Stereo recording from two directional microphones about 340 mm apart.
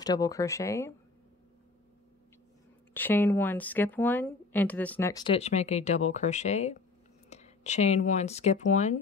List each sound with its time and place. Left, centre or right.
0.0 s speech: centre
2.9 s speech: centre; by 9.0 s left